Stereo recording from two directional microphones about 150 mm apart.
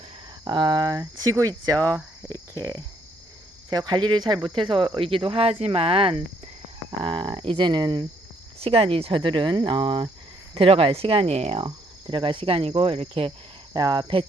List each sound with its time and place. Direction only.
0.4 s speech: 30° right (ahead or behind)
3.7 s cricket: 30° right (ahead or behind)
8.6 s cricket: 40° right (ahead or behind)
13.7 s speech: 25° right (ahead or behind)